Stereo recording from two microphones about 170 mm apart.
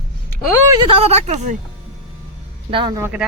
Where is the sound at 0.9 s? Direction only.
40° right (ahead or behind).